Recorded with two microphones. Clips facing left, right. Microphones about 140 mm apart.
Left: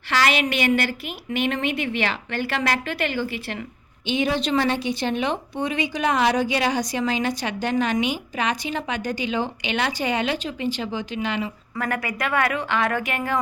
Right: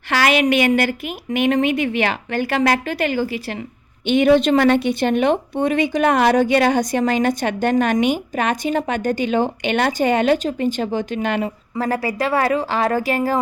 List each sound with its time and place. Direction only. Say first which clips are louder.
0.1 s a woman's voice: right 5 dB; 45° right (ahead or behind)
4.0 s a woman's voice: right 9 dB; 55° right (ahead or behind)
11.7 s a woman's voice: right 6 dB; 30° right (ahead or behind)